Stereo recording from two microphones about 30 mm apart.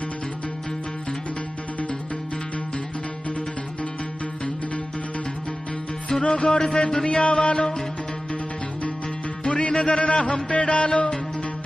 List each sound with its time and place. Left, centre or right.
6.0 s music: left
7.1 s music: left
9.4 s music: left